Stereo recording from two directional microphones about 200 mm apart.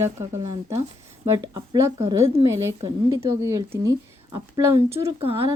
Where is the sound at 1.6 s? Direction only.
20° right (ahead or behind).